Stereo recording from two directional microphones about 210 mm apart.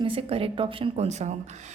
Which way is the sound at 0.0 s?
25° right (ahead or behind).